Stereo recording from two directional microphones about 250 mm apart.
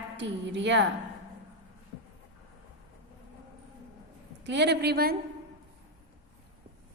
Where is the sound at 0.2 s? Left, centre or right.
Right.